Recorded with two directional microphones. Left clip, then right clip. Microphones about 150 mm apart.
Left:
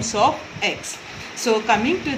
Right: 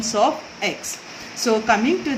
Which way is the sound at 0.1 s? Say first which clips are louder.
Even; 50° right (ahead or behind).